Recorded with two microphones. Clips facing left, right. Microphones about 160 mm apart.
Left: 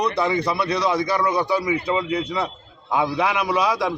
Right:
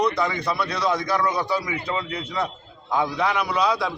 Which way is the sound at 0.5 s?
5° left (ahead or behind).